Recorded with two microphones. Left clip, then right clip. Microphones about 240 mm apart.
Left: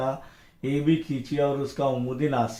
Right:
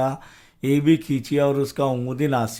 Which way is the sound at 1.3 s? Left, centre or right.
Right.